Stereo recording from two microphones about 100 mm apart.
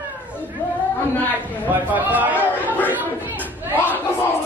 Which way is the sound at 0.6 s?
20° left (ahead or behind).